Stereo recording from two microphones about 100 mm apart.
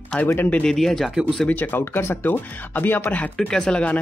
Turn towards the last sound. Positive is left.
turn(degrees=10)  # may be behind; listen again after turning